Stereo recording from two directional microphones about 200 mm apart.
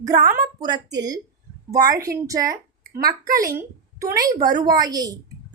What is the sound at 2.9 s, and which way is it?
Speech, 50° right (ahead or behind).